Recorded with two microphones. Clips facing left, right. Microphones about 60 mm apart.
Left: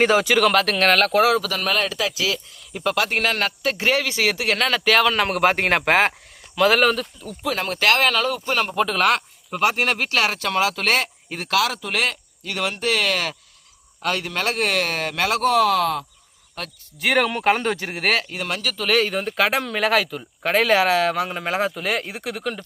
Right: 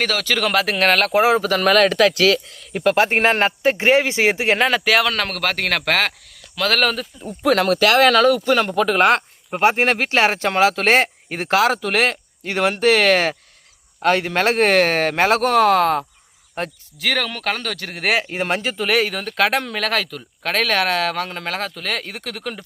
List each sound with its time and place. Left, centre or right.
0.0 s speech: left
0.3 s speech: centre
1.1 s speech: right
1.5 s a man's voice: right
2.9 s speech: right
4.7 s speech: centre
5.1 s speech: centre
6.6 s speech: centre
7.4 s a man's voice: right
9.0 s speech: right
16.6 s speech: right
17.0 s speech: centre
18.2 s speech: right
18.9 s speech: centre